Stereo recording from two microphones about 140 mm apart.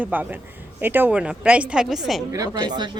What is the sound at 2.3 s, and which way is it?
Speech, 25° right (ahead or behind).